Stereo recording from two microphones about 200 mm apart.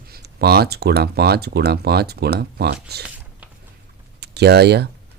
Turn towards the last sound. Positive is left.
turn(degrees=-55)  # may be behind; listen again after turning